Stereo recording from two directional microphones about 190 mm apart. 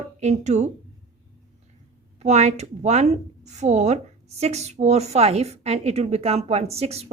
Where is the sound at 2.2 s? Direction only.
35° right (ahead or behind).